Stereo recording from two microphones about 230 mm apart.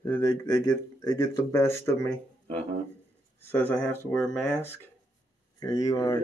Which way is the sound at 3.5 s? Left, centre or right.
Centre.